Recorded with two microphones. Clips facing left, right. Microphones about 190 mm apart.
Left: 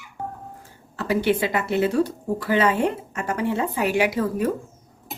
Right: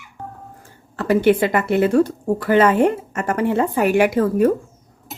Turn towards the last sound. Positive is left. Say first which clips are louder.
# right 6 dB
turn(degrees=-50)  # may be behind; listen again after turning